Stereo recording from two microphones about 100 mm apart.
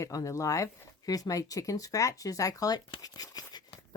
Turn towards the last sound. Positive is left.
turn(degrees=45)  # may be behind; listen again after turning